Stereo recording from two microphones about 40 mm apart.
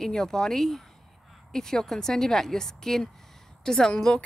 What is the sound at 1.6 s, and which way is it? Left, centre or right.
A woman's voice, centre.